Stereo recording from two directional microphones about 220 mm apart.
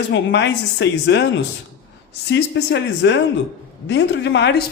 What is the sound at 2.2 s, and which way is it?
Speech, 55° left (ahead or behind).